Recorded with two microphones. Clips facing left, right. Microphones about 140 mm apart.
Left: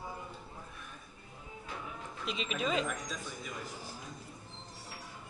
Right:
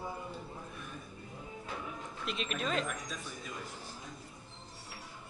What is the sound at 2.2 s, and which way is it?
Speech, centre (ahead or behind).